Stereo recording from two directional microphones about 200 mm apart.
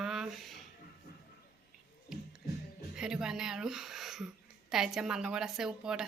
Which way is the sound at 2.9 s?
5° right (ahead or behind).